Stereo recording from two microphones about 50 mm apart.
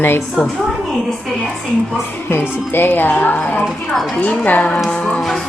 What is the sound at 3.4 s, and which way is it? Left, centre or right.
Speech, left.